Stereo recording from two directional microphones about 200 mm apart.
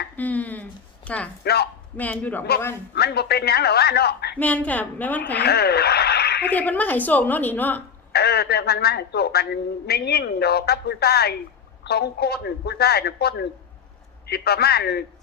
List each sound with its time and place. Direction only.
0.2 s a sound: 10° left (ahead or behind)
1.5 s speech: 50° left (ahead or behind)
2.0 s a woman's voice: 10° left (ahead or behind)
2.9 s speech: 55° left (ahead or behind)
4.4 s a woman's voice: 5° left (ahead or behind)
5.4 s speech: 50° left (ahead or behind)
6.5 s a woman's voice: 10° left (ahead or behind)
8.1 s speech: 50° left (ahead or behind)